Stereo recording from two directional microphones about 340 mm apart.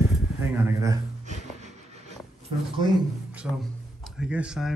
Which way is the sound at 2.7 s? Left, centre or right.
Centre.